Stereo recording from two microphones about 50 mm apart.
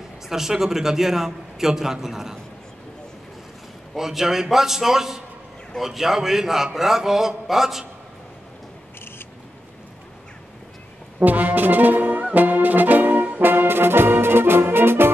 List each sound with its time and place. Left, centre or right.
0.3 s a man's voice: centre
3.9 s a man's voice: centre
11.1 s brass instrument: right